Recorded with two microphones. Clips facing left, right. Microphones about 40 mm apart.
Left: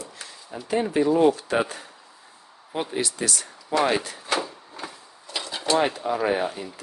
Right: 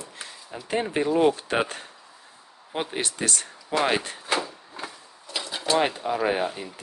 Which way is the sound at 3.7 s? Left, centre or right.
Right.